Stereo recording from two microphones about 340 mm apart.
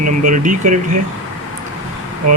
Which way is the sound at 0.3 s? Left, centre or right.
Right.